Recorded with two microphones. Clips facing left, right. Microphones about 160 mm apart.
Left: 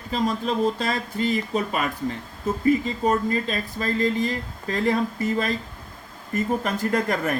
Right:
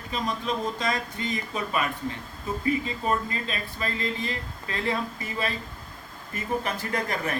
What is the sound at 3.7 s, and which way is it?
Speech, 40° left (ahead or behind).